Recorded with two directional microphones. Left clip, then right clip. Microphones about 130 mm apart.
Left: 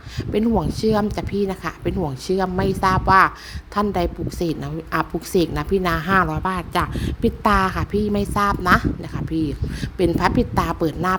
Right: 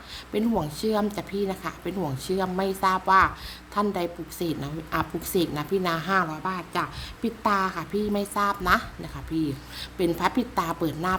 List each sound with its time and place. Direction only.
0.3 s a woman's voice: 45° left (ahead or behind)